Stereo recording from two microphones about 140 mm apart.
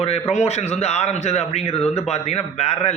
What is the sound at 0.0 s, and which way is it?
A man's voice, 45° left (ahead or behind).